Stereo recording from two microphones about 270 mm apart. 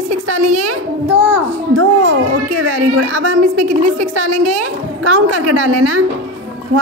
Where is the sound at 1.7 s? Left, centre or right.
Right.